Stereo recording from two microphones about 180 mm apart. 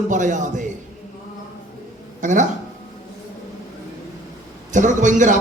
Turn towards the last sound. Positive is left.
turn(degrees=-45)  # may be behind; listen again after turning